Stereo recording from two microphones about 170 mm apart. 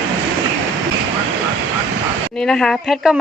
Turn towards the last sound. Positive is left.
turn(degrees=0)  # may be behind; listen again after turning